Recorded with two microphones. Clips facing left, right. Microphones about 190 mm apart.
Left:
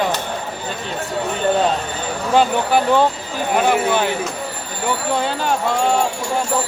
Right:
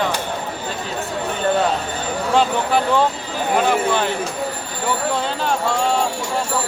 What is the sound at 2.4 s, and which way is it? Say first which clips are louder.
Speech: left 3 dB; 5° left (ahead or behind).